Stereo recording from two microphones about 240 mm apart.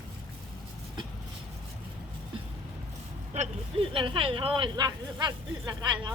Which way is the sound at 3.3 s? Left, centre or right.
Right.